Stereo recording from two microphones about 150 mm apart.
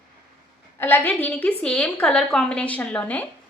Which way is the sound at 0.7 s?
15° left (ahead or behind).